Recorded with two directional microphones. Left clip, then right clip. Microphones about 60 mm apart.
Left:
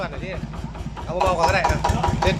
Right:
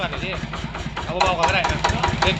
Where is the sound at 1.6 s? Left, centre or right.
Left.